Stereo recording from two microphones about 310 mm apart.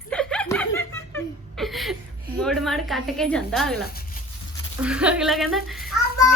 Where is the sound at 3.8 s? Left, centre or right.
Left.